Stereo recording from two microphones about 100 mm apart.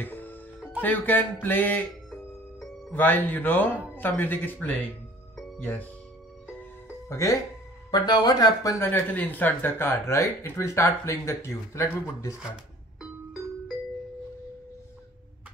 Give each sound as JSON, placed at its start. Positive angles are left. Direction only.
{"t": 0.0, "sound": "speech", "side_deg": 20}
{"t": 2.9, "sound": "speech", "side_deg": 20}
{"t": 7.1, "sound": "speech", "side_deg": 30}
{"t": 7.9, "sound": "speech", "side_deg": 45}
{"t": 8.7, "sound": "speech", "side_deg": 20}
{"t": 13.0, "sound": "music", "side_deg": -5}